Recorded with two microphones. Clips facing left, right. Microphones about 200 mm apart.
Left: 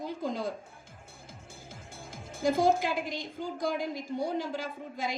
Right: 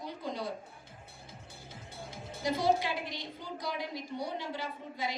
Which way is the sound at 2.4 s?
45° left (ahead or behind).